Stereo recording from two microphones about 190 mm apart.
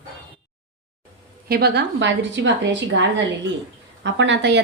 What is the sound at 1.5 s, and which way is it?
A woman's voice, 55° right (ahead or behind).